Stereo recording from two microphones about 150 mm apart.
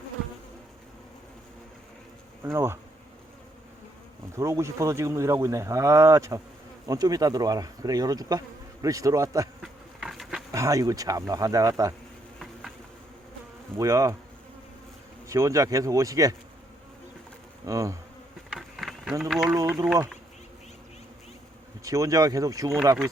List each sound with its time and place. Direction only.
2.4 s speech: 15° right (ahead or behind)
4.4 s insect: 20° right (ahead or behind)
9.6 s insect: centre (ahead or behind)
10.5 s insect: 20° right (ahead or behind)
13.7 s insect: 20° right (ahead or behind)
15.3 s insect: 20° right (ahead or behind)
17.7 s insect: 20° right (ahead or behind)
18.5 s insect: centre (ahead or behind)
19.2 s speech: 5° right (ahead or behind)
19.5 s speech: 15° right (ahead or behind)
21.8 s insect: 20° right (ahead or behind)